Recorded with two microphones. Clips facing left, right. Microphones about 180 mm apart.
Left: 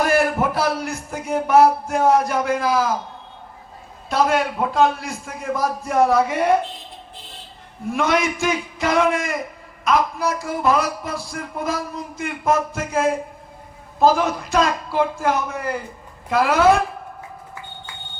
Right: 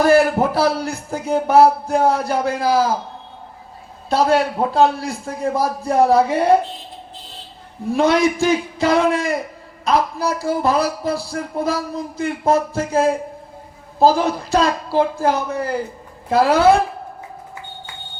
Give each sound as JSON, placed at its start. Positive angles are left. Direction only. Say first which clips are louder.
{"t": 0.0, "sound": "speech", "louder": "right 5 dB", "side_deg": -30}
{"t": 4.1, "sound": "speech", "louder": "right 3 dB", "side_deg": -35}
{"t": 7.9, "sound": "speech", "louder": "right 5 dB", "side_deg": -35}